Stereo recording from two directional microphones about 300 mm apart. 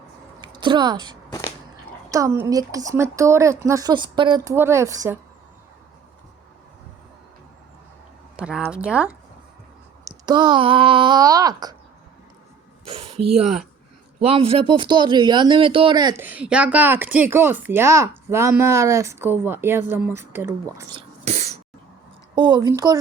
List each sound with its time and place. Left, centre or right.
0.4 s speech: centre
1.3 s a sound: centre
2.0 s speech: centre
8.4 s a woman's voice: centre
10.2 s speech: centre
13.1 s a sound: right
14.3 s speech: centre
21.2 s cough: right
22.4 s speech: centre